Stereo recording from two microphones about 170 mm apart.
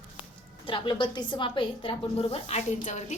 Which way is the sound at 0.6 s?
30° left (ahead or behind).